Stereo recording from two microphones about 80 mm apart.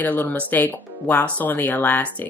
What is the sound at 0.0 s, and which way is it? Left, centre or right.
Speech, left.